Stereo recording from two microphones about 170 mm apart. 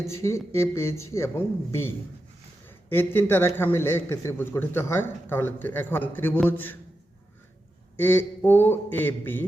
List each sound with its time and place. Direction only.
0.0 s a man's voice: 15° left (ahead or behind)
7.9 s a man's voice: 10° left (ahead or behind)